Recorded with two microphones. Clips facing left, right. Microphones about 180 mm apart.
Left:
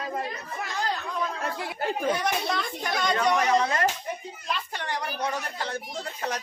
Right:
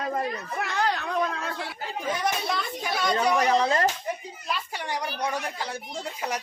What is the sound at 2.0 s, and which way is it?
Speech, centre (ahead or behind).